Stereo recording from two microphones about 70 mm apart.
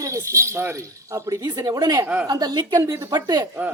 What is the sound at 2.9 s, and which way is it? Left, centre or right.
Speech, right.